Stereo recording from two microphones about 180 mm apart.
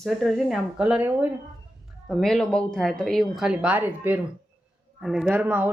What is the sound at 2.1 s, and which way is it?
A woman's voice, centre (ahead or behind).